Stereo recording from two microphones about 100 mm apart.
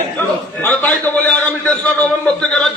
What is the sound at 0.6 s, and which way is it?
A man's voice, 20° left (ahead or behind).